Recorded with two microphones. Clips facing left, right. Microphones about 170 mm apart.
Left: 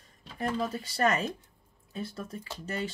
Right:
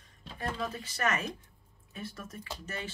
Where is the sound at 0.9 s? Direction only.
30° left (ahead or behind).